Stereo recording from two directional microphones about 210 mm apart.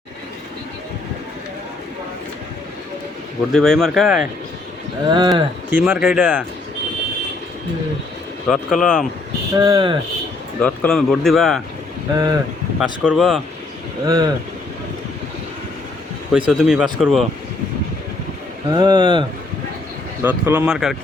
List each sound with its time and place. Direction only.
3.5 s speech: centre (ahead or behind)
5.1 s speech: 20° right (ahead or behind)
5.8 s speech: 5° right (ahead or behind)
8.4 s speech: centre (ahead or behind)
9.6 s speech: 20° right (ahead or behind)
10.6 s speech: 5° left (ahead or behind)
12.1 s speech: 20° right (ahead or behind)
12.8 s speech: centre (ahead or behind)
14.0 s speech: 15° right (ahead or behind)
16.5 s speech: centre (ahead or behind)
18.7 s speech: 20° right (ahead or behind)
20.2 s speech: 10° right (ahead or behind)